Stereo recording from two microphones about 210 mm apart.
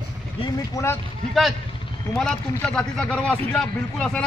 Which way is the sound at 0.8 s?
15° left (ahead or behind).